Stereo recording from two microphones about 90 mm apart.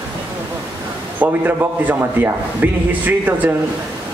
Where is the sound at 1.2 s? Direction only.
20° right (ahead or behind).